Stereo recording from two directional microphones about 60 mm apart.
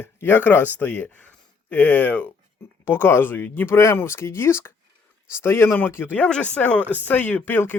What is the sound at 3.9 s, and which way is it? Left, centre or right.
Speech, left.